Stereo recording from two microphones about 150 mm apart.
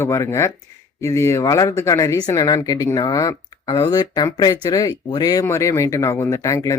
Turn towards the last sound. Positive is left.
turn(degrees=20)  # may be behind; listen again after turning